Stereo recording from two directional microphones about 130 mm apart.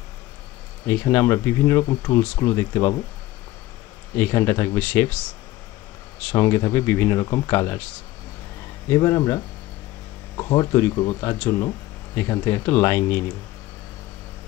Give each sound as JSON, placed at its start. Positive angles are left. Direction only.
{"t": 0.8, "sound": "speech", "side_deg": 15}
{"t": 4.2, "sound": "speech", "side_deg": 20}
{"t": 6.2, "sound": "speech", "side_deg": 20}
{"t": 8.9, "sound": "speech", "side_deg": 25}